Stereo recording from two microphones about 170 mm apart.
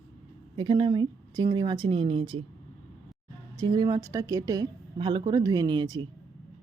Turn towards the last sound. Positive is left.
turn(degrees=-25)  # may be behind; listen again after turning